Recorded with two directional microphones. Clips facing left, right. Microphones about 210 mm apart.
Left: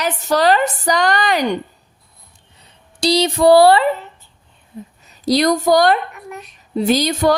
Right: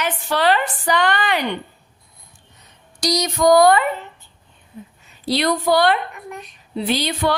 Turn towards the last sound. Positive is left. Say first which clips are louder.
# left 5 dB
turn(degrees=45)  # may be behind; listen again after turning